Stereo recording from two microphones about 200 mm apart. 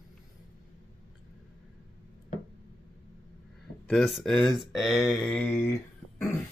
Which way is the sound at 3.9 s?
Centre (ahead or behind).